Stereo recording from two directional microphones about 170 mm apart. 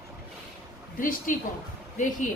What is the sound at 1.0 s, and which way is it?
Speech, 55° left (ahead or behind).